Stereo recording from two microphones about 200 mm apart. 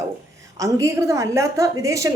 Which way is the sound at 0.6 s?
15° right (ahead or behind).